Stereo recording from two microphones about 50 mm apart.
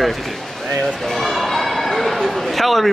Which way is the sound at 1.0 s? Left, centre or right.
Centre.